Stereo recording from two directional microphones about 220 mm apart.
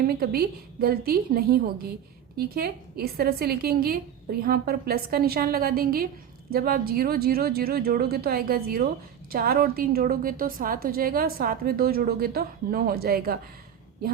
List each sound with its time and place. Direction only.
0.0 s a woman's voice: 45° right (ahead or behind)